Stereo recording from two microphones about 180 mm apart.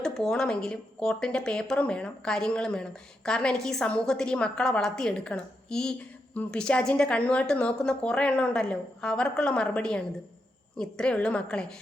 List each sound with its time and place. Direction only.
0.0 s a woman's voice: 5° left (ahead or behind)